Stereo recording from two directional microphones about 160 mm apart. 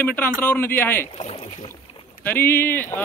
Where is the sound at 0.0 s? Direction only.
10° left (ahead or behind).